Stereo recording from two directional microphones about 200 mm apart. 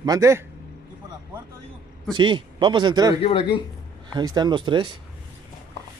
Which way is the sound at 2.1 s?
25° right (ahead or behind).